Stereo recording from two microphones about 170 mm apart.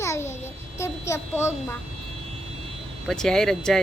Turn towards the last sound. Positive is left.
turn(degrees=5)  # may be behind; listen again after turning